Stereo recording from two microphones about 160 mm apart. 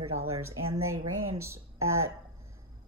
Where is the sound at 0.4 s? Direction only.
15° right (ahead or behind).